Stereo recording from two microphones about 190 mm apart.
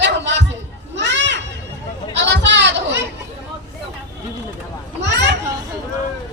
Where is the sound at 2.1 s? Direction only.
70° right (ahead or behind).